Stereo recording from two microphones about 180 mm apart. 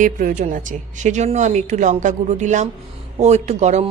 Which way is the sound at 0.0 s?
45° right (ahead or behind).